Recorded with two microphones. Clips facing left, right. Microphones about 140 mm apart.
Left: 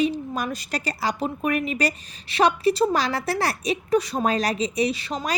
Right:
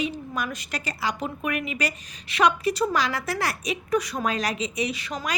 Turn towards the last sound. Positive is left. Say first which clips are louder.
# left 3 dB
turn(degrees=30)  # may be behind; listen again after turning